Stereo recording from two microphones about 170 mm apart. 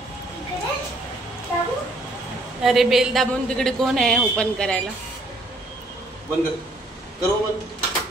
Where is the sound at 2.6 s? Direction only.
Centre (ahead or behind).